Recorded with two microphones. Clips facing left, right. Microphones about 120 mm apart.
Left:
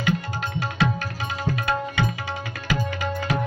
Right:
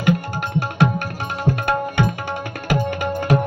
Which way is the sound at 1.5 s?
50° right (ahead or behind).